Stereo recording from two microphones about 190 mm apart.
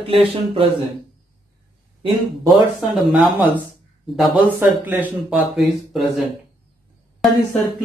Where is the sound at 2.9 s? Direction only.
Centre (ahead or behind).